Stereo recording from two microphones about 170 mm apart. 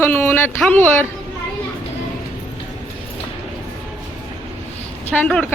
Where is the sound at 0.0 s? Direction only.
10° left (ahead or behind).